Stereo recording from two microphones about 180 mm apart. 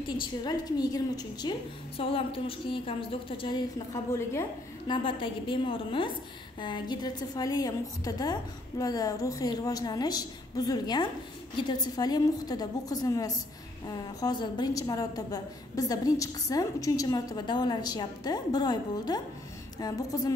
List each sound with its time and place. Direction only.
0.2 s a woman's voice: 25° left (ahead or behind)
4.9 s a woman's voice: 30° left (ahead or behind)